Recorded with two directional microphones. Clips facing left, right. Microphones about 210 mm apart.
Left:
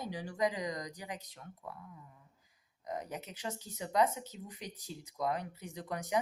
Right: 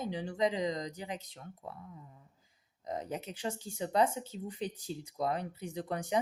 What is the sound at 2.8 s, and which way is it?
Speech, 30° right (ahead or behind).